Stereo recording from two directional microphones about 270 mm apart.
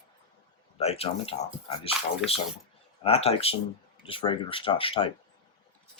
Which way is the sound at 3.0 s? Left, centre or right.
Left.